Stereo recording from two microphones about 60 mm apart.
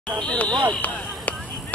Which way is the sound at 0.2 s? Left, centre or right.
Centre.